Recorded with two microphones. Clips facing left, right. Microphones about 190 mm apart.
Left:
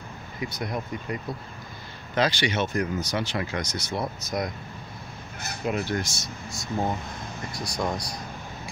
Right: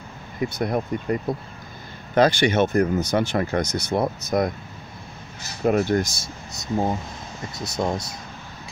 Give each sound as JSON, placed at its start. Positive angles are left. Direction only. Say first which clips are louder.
{"t": 0.4, "sound": "speech", "louder": "right 7 dB", "side_deg": -45}
{"t": 5.6, "sound": "speech", "louder": "right 8 dB", "side_deg": -50}
{"t": 6.2, "sound": "speech", "louder": "right 2 dB", "side_deg": -20}